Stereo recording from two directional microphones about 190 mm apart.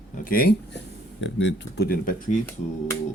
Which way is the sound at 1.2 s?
70° left (ahead or behind).